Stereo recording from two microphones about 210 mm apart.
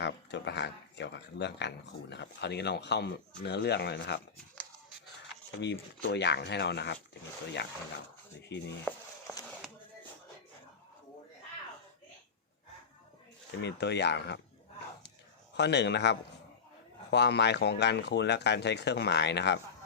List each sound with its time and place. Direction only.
0.0 s speech: 55° left (ahead or behind)
5.5 s speech: 55° left (ahead or behind)
8.4 s speech: 55° left (ahead or behind)
8.9 s speech: 5° left (ahead or behind)
13.6 s speech: 55° left (ahead or behind)
15.5 s speech: 55° left (ahead or behind)